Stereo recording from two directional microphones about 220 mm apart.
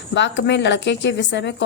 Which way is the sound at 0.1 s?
55° left (ahead or behind).